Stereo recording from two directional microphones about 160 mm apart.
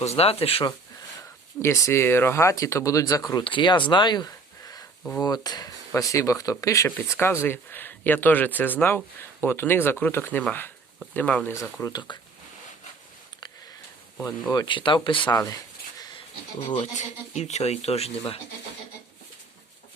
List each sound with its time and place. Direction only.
0.0 s speech: 40° left (ahead or behind)
1.6 s speech: 15° left (ahead or behind)
11.8 s speech: 25° left (ahead or behind)
14.2 s speech: 10° left (ahead or behind)
14.5 s speech: 30° left (ahead or behind)
16.6 s speech: 35° left (ahead or behind)